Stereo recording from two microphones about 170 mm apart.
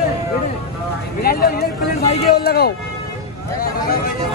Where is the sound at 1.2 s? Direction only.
60° left (ahead or behind).